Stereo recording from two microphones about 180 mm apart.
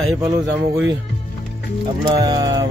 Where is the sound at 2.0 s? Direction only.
20° right (ahead or behind).